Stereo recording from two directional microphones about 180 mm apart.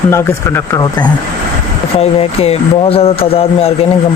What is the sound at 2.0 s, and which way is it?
Speech, 35° left (ahead or behind).